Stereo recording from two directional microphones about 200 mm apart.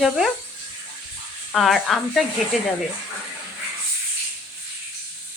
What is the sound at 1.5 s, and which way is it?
Speech, centre (ahead or behind).